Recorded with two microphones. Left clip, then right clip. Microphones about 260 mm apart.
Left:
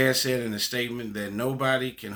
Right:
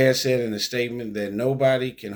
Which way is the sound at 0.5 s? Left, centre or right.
Left.